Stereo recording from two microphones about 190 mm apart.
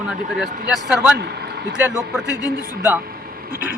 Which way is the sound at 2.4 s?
10° right (ahead or behind).